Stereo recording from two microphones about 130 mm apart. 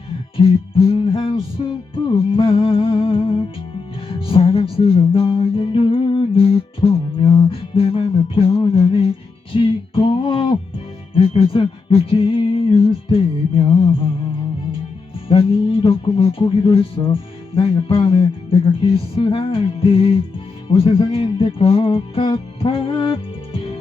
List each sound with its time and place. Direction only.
0.9 s music: 45° left (ahead or behind)
15.3 s music: 45° left (ahead or behind)
20.7 s speech: 45° left (ahead or behind)